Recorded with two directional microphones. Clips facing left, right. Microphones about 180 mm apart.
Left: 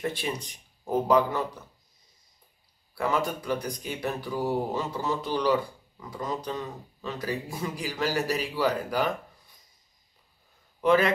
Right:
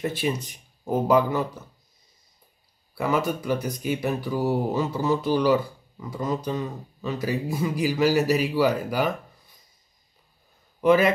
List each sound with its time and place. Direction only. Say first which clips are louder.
0.1 s a man's voice: right 6 dB; 5° right (ahead or behind)
2.9 s speech: right 3 dB; 5° right (ahead or behind)
10.8 s a man's voice: right 3 dB; 5° right (ahead or behind)